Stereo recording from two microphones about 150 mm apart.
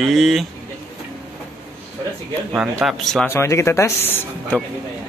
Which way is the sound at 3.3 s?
15° left (ahead or behind).